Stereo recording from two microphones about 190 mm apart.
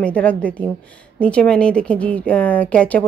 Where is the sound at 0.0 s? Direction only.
5° left (ahead or behind).